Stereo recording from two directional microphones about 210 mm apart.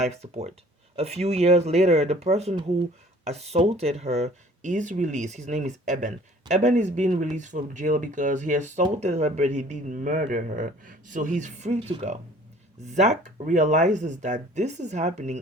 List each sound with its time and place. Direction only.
0.0 s speech: 30° right (ahead or behind)